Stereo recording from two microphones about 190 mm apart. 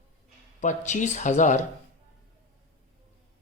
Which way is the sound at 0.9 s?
40° left (ahead or behind).